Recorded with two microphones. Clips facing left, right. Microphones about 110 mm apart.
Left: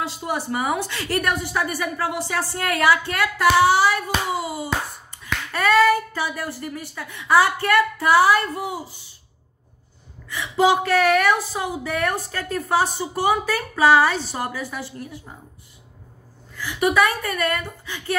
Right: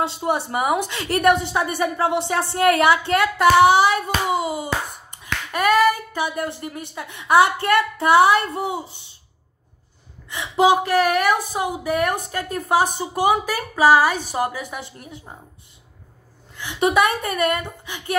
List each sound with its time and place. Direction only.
0.0 s hands: 25° right (ahead or behind)
10.3 s a woman's voice: 15° right (ahead or behind)
16.5 s hands: 20° right (ahead or behind)